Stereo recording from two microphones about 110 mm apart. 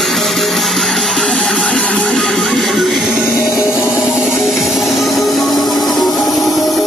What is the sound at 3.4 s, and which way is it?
Music, 30° left (ahead or behind).